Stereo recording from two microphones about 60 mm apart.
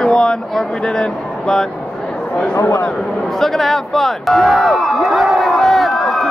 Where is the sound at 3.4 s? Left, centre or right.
Centre.